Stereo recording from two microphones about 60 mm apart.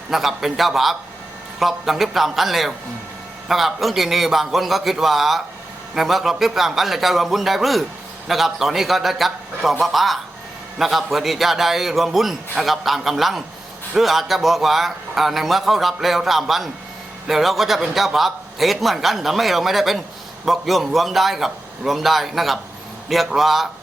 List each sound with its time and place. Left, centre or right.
0.1 s a man's voice: centre